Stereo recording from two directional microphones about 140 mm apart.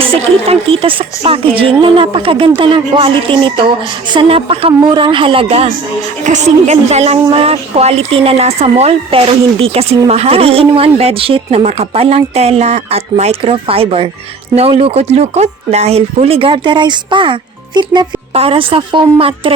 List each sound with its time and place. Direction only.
0.1 s speech: 40° right (ahead or behind)
6.2 s speech: 55° right (ahead or behind); by 17.3 s 35° right (ahead or behind)
18.3 s speech: 40° right (ahead or behind)